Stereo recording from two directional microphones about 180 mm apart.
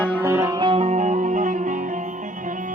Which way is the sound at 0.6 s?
35° right (ahead or behind).